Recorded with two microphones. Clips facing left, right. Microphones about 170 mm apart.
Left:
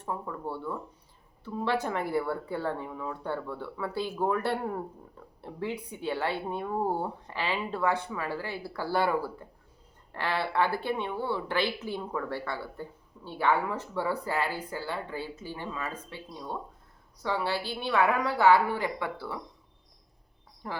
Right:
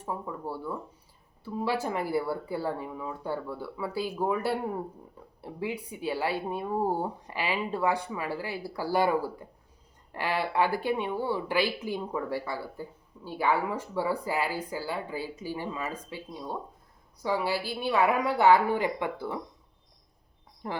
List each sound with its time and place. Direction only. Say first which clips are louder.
0.0 s speech: even; 10° right (ahead or behind)
20.6 s a woman's voice: right 2 dB; 25° right (ahead or behind)